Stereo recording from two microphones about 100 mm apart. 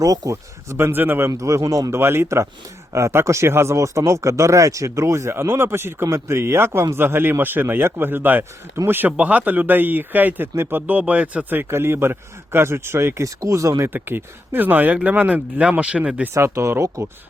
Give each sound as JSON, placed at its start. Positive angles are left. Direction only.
{"t": 0.0, "sound": "speech", "side_deg": -35}
{"t": 1.3, "sound": "speech", "side_deg": -35}
{"t": 13.9, "sound": "speech", "side_deg": -20}
{"t": 16.3, "sound": "speech", "side_deg": -30}